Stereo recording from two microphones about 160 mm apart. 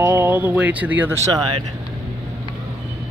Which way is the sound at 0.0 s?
15° right (ahead or behind).